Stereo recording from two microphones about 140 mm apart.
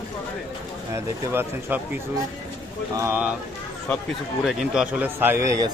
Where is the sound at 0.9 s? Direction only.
20° right (ahead or behind).